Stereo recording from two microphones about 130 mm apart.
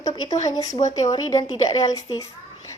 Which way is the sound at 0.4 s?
30° left (ahead or behind).